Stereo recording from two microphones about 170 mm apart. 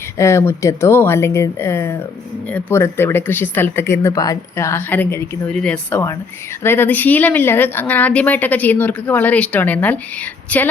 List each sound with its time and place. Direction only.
0.2 s speech: 15° left (ahead or behind)